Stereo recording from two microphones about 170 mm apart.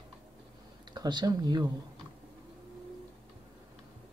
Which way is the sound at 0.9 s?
25° right (ahead or behind).